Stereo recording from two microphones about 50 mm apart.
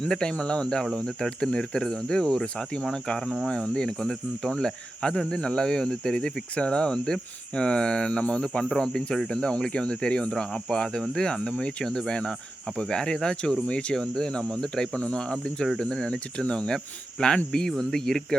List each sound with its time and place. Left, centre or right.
0.0 s speech: centre
14.9 s cricket: left
15.8 s speech: centre